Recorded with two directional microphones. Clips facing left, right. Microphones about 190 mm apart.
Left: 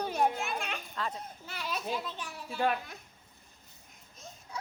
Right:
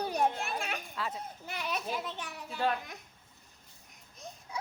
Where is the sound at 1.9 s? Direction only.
20° right (ahead or behind).